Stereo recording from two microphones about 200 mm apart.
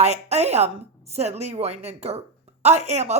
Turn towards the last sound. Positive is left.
turn(degrees=-35)  # may be behind; listen again after turning